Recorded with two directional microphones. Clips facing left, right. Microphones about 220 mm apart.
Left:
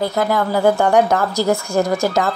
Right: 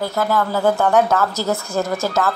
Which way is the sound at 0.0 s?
15° left (ahead or behind).